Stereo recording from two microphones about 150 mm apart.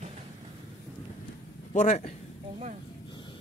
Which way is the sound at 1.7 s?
55° left (ahead or behind).